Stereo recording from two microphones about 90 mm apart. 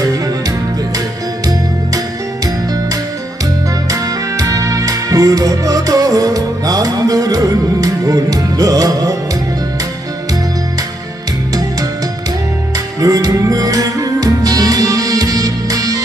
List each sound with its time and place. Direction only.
0.0 s music: 40° right (ahead or behind)
3.9 s music: 40° right (ahead or behind)
13.0 s music: 40° right (ahead or behind)